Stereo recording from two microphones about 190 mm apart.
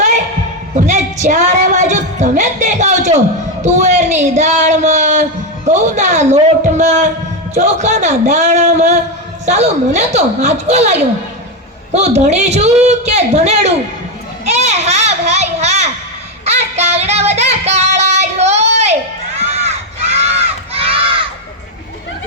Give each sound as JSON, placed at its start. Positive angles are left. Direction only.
{"t": 0.8, "sound": "a woman's voice", "side_deg": -40}
{"t": 3.6, "sound": "a sound", "side_deg": -40}
{"t": 5.6, "sound": "a man's voice", "side_deg": -40}
{"t": 12.2, "sound": "a woman's voice", "side_deg": -35}
{"t": 14.4, "sound": "children playing", "side_deg": -35}
{"t": 16.5, "sound": "music", "side_deg": -35}
{"t": 19.4, "sound": "crowd", "side_deg": -35}
{"t": 20.1, "sound": "a sound", "side_deg": -30}